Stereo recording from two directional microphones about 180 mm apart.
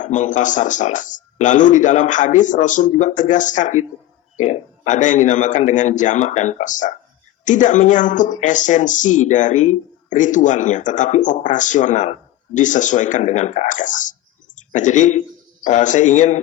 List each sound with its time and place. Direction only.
0.0 s speech: 45° left (ahead or behind)